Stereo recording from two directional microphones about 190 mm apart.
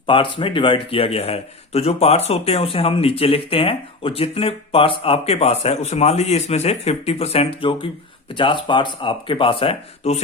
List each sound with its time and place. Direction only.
0.1 s speech: 25° left (ahead or behind)